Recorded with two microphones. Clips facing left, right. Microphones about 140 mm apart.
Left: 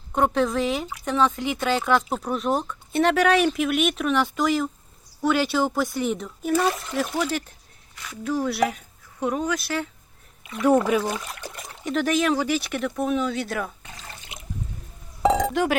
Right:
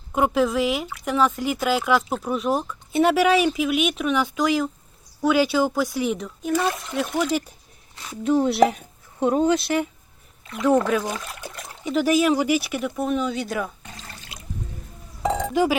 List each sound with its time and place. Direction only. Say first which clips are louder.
0.1 s speech: right 1 dB; 5° right (ahead or behind)
7.9 s speech: right 6 dB; 25° right (ahead or behind)
10.7 s speech: even; 10° left (ahead or behind)
14.1 s water: even; 20° left (ahead or behind)
15.2 s chink: left 4 dB; 90° left
15.5 s speech: right 2 dB; 5° right (ahead or behind)